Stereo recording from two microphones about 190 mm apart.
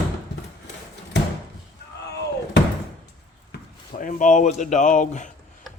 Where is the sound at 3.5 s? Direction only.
45° left (ahead or behind).